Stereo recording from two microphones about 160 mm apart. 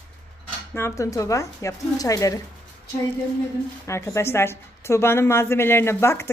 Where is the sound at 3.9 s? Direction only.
15° left (ahead or behind).